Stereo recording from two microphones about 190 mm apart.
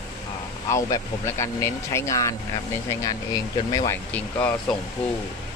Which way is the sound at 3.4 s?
20° left (ahead or behind).